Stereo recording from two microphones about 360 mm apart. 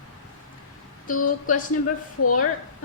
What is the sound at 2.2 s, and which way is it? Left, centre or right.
Speech, left.